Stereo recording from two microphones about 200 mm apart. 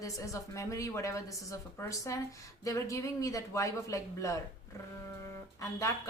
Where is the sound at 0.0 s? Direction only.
15° left (ahead or behind).